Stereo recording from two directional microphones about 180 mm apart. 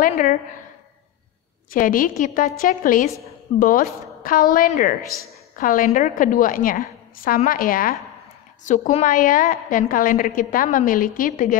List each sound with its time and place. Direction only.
0.0 s a woman's voice: 50° left (ahead or behind)
1.7 s a woman's voice: 50° left (ahead or behind)